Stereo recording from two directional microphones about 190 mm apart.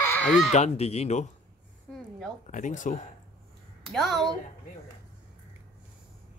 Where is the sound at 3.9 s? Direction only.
Centre (ahead or behind).